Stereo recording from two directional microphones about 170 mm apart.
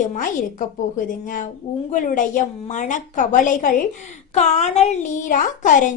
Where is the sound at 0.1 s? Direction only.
50° left (ahead or behind).